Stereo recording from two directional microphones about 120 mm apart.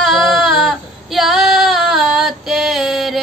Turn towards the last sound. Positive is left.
turn(degrees=0)  # may be behind; listen again after turning